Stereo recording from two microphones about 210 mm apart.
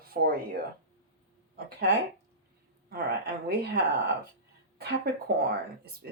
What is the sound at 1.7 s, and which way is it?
Speech, 45° right (ahead or behind).